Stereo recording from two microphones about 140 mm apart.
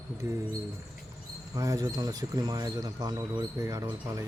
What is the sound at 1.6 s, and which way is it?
Speech, 25° right (ahead or behind).